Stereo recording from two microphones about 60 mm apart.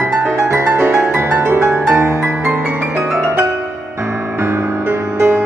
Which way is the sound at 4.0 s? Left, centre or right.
Right.